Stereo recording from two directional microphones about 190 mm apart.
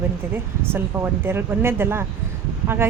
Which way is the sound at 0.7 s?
10° right (ahead or behind).